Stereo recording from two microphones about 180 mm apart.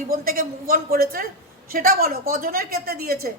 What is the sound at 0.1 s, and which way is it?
A woman's voice, 55° right (ahead or behind).